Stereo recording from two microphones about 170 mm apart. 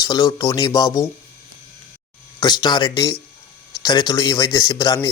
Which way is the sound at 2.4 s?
25° left (ahead or behind).